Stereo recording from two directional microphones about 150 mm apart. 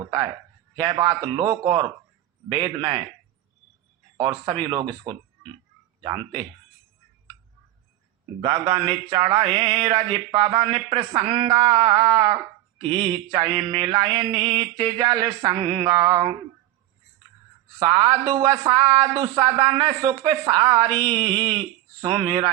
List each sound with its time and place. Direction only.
0.0 s speech: 25° right (ahead or behind)
1.3 s mantra: 35° right (ahead or behind)
4.6 s speech: 30° right (ahead or behind)
8.4 s mantra: 35° right (ahead or behind)
11.4 s speech: 30° right (ahead or behind)
12.8 s mantra: 35° right (ahead or behind)
13.3 s speech: 30° right (ahead or behind)
17.7 s speech: 30° right (ahead or behind)
21.0 s mantra: 35° right (ahead or behind)